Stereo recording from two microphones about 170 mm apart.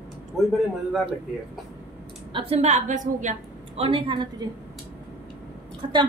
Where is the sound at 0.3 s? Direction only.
Centre (ahead or behind).